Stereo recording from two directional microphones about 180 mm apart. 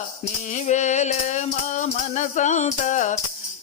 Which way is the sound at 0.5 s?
40° left (ahead or behind).